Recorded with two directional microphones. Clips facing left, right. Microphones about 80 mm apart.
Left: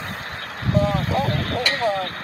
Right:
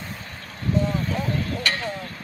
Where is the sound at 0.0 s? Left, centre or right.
Left.